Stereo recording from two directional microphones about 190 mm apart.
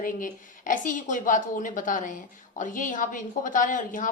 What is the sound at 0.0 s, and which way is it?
A woman's voice, 45° left (ahead or behind).